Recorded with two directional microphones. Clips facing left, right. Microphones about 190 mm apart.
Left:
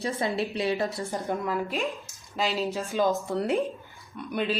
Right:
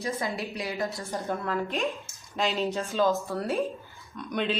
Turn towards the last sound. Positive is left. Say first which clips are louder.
# left 1 dB
turn(degrees=5)  # may be behind; listen again after turning